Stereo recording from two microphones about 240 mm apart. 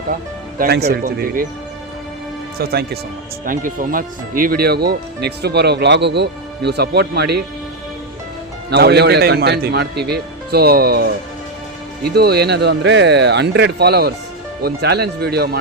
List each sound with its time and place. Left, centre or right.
0.6 s speech: right
2.6 s speech: right
8.7 s speech: right